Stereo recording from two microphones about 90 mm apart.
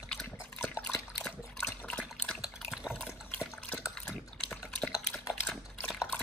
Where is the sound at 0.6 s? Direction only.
30° left (ahead or behind).